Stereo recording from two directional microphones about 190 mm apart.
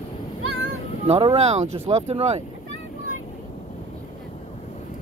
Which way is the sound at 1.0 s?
30° right (ahead or behind).